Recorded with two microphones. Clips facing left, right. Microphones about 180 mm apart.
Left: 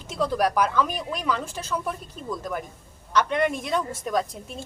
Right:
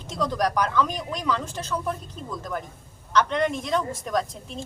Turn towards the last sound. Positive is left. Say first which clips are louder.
# even
turn(degrees=5)  # may be behind; listen again after turning